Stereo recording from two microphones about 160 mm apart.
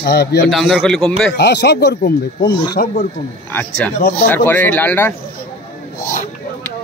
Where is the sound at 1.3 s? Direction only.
90° left.